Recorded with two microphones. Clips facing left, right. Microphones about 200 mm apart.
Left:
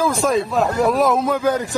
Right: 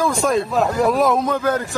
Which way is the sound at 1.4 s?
15° left (ahead or behind).